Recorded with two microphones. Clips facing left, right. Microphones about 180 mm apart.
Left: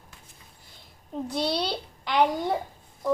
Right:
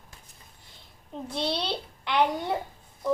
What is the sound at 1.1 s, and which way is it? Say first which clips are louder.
A child's voice: left 3 dB; 5° left (ahead or behind).